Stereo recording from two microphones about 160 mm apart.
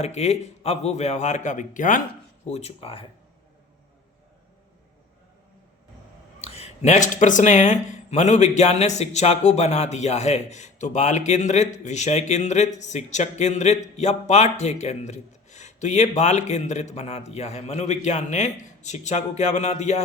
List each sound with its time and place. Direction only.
0.0 s speech: 45° left (ahead or behind)
6.5 s speech: 45° left (ahead or behind)